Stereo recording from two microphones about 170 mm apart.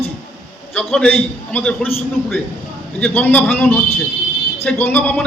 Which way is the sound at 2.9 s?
10° left (ahead or behind).